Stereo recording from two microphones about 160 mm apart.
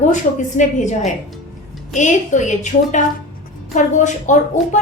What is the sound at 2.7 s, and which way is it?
Speech, 60° left (ahead or behind).